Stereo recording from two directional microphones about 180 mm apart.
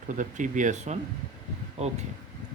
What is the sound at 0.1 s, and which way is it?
Speech, 45° right (ahead or behind).